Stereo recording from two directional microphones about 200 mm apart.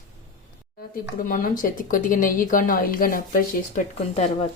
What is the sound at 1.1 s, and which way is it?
A woman's voice, 45° left (ahead or behind).